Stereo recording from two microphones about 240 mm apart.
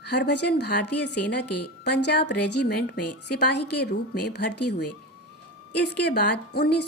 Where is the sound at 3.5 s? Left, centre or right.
Left.